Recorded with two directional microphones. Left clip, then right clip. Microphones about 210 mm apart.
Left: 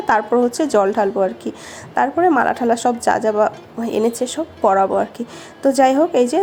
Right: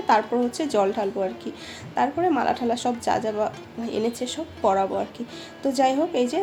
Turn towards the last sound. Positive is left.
turn(degrees=30)  # may be behind; listen again after turning